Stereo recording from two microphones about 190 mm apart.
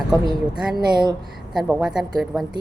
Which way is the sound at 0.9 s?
20° right (ahead or behind).